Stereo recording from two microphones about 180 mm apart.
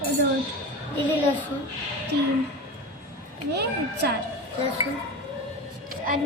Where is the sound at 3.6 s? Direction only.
65° right (ahead or behind).